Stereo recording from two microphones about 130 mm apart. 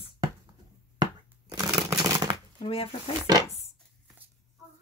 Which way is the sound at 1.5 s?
30° right (ahead or behind).